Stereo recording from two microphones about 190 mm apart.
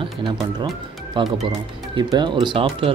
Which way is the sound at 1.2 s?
25° right (ahead or behind).